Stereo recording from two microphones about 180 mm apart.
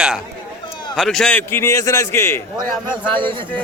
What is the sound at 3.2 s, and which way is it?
Speech, 25° right (ahead or behind).